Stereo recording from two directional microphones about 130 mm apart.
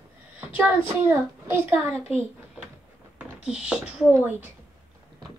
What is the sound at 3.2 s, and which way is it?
Speech, 5° right (ahead or behind).